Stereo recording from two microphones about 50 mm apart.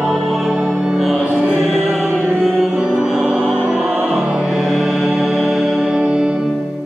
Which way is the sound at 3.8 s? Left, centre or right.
Right.